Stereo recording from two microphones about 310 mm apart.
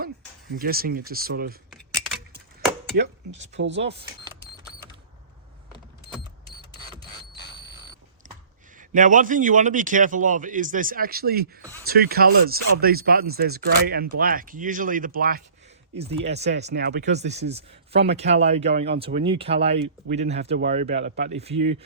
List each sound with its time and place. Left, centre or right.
0.5 s a man's voice: right
2.9 s speech: right
7.3 s a sound: left
8.9 s a man's voice: right
16.5 s speech: right
17.2 s a man's voice: right
21.0 s speech: right
21.3 s a man's voice: centre